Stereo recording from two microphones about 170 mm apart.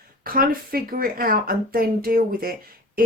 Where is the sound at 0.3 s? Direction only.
60° right (ahead or behind).